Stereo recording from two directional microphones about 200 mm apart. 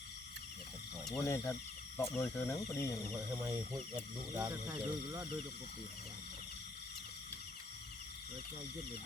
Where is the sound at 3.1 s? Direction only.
10° right (ahead or behind).